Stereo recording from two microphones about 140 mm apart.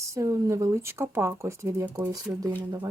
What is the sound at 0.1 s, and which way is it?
Speech, 25° right (ahead or behind).